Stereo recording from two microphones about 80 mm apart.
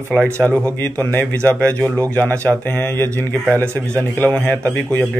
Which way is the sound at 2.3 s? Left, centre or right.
Right.